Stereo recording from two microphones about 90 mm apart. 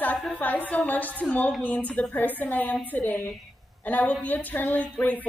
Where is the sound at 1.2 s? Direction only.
15° left (ahead or behind).